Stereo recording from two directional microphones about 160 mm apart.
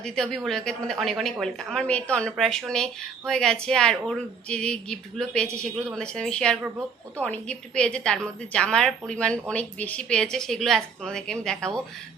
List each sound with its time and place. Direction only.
0.0 s a woman's voice: 5° left (ahead or behind)